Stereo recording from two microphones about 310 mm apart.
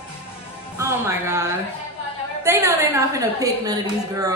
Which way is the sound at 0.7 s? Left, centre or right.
Centre.